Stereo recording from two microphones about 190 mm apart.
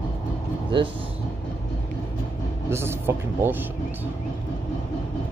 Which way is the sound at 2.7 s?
15° right (ahead or behind).